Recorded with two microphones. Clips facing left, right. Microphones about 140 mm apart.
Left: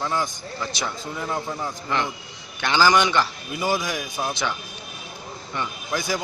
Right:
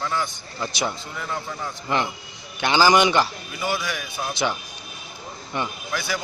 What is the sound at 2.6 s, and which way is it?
Speech, 15° right (ahead or behind).